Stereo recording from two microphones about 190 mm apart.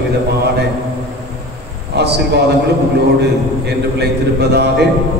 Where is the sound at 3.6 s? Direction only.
60° right (ahead or behind).